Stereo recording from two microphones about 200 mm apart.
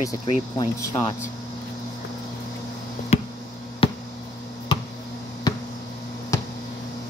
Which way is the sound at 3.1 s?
30° left (ahead or behind).